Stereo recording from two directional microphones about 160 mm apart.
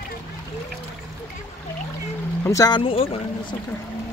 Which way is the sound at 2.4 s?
20° left (ahead or behind).